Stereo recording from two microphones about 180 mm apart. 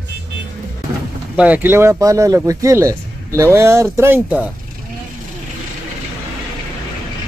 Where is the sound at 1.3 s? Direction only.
10° right (ahead or behind).